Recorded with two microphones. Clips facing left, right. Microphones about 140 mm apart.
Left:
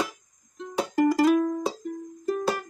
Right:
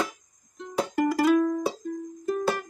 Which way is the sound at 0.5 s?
15° left (ahead or behind).